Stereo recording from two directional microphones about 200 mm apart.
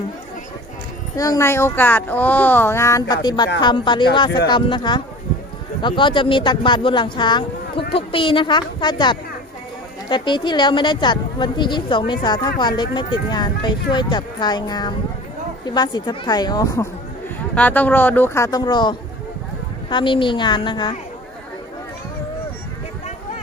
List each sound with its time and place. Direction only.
1.1 s a woman's voice: 15° left (ahead or behind)